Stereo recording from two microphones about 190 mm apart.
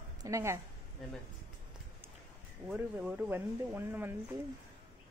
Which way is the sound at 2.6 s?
10° right (ahead or behind).